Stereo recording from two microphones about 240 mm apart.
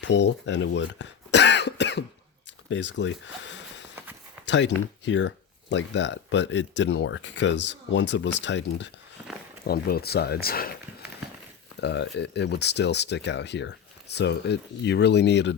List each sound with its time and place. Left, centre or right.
0.0 s cough: left
2.6 s speech: left
11.8 s speech: left